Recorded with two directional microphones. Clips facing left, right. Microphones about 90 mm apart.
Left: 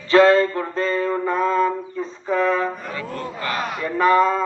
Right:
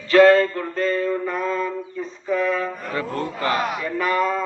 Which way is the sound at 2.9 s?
40° right (ahead or behind).